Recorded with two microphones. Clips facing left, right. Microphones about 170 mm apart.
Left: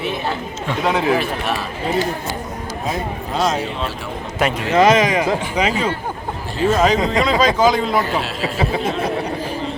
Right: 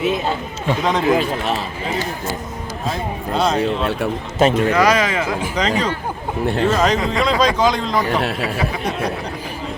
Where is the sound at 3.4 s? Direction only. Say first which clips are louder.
Right 1 dB; centre (ahead or behind).